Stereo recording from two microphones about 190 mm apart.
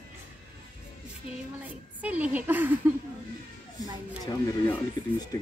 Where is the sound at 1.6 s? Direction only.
10° right (ahead or behind).